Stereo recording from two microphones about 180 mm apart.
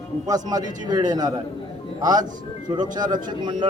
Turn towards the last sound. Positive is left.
turn(degrees=-25)  # may be behind; listen again after turning